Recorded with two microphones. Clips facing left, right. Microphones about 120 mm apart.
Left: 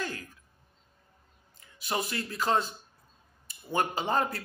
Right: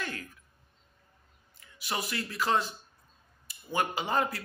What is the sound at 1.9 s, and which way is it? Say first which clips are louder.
Speech: left 2 dB; 30° left (ahead or behind).